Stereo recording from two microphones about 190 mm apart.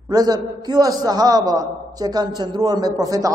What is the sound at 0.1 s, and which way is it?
A man's voice, 20° right (ahead or behind).